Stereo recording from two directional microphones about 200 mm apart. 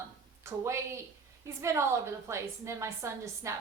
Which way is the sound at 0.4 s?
15° right (ahead or behind).